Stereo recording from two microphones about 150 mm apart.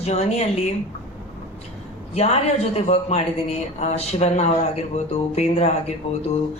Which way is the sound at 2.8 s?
45° left (ahead or behind).